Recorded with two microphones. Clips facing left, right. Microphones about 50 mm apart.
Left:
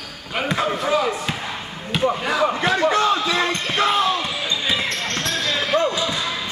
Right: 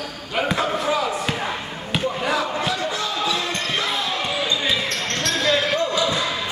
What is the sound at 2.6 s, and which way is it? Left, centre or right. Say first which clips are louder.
Basketball bounce: left 6 dB; left.